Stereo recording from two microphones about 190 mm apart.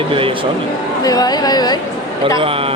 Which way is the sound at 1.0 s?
20° left (ahead or behind).